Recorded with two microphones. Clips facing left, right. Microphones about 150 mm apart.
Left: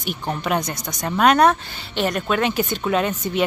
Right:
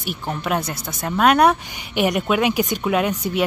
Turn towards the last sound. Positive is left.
turn(degrees=-10)  # may be behind; listen again after turning